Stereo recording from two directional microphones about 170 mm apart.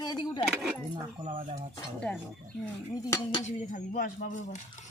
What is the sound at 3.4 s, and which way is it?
Speech, 45° left (ahead or behind).